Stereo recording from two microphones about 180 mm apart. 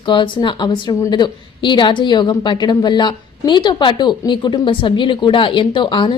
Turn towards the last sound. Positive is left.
turn(degrees=25)  # may be behind; listen again after turning